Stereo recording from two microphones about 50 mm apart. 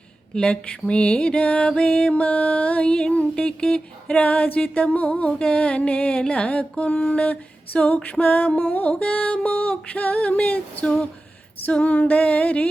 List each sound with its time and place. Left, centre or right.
0.3 s music: left
4.2 s music: left